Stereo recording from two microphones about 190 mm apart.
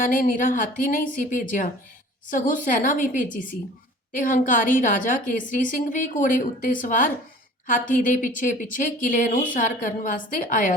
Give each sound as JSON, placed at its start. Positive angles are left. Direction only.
{"t": 0.0, "sound": "a woman's voice", "side_deg": 45}